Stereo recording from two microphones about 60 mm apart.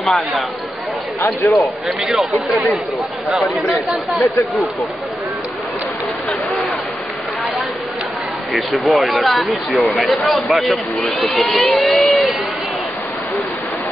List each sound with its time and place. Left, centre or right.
0.0 s speech: centre
1.4 s speech: left
1.9 s speech: centre
8.7 s speech: centre